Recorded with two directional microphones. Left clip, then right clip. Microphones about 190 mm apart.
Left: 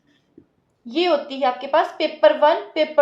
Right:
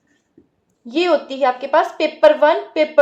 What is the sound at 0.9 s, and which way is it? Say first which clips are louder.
A woman's voice: right 3 dB; 45° right (ahead or behind).